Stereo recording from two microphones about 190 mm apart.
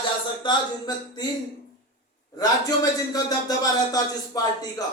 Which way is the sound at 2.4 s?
20° left (ahead or behind).